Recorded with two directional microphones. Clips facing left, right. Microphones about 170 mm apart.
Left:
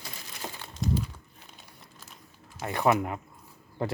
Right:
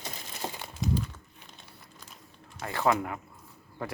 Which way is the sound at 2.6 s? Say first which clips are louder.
Left 2 dB; 20° left (ahead or behind).